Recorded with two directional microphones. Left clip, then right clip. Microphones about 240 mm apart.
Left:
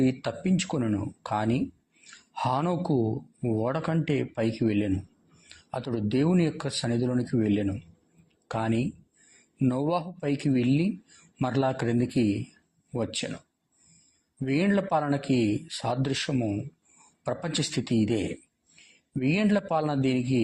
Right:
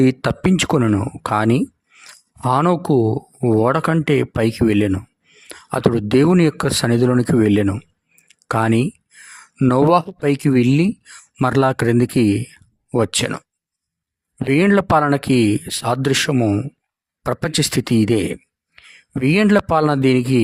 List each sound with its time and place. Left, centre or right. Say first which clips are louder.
0.0 s speech: right 11 dB; right
14.4 s speech: right 11 dB; right